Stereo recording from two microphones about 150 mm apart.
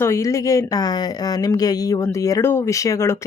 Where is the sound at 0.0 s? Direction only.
20° left (ahead or behind).